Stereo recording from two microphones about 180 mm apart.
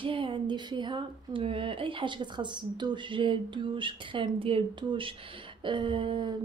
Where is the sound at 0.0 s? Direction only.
30° right (ahead or behind).